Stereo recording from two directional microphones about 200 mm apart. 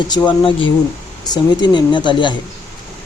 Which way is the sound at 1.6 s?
25° left (ahead or behind).